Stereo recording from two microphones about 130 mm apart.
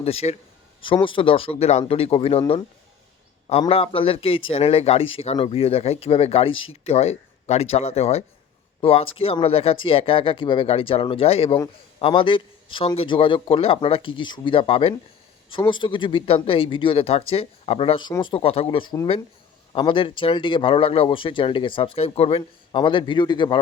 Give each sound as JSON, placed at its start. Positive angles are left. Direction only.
{"t": 0.0, "sound": "speech", "side_deg": 50}
{"t": 1.0, "sound": "speech", "side_deg": 40}
{"t": 3.7, "sound": "a man's voice", "side_deg": 45}